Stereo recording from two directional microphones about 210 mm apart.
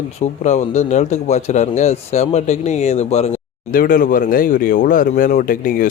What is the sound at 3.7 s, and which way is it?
Speech, 45° left (ahead or behind).